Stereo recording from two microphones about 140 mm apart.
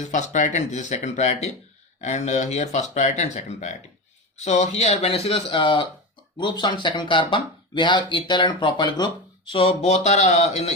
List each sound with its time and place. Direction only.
0.0 s speech: 60° left (ahead or behind); by 9.0 s 30° left (ahead or behind)
9.5 s speech: 45° left (ahead or behind)